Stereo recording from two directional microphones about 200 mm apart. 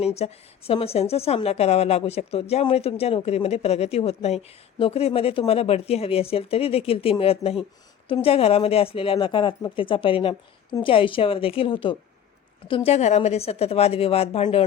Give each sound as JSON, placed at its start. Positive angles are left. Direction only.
{"t": 0.0, "sound": "a woman's voice", "side_deg": 30}